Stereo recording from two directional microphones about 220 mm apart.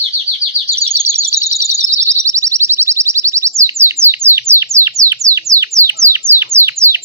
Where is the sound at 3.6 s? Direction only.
10° right (ahead or behind).